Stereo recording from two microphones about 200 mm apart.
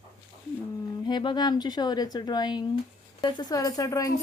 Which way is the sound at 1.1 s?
20° left (ahead or behind).